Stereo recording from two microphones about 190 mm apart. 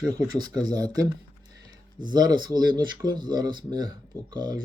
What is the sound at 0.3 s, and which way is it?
Speech, 20° right (ahead or behind).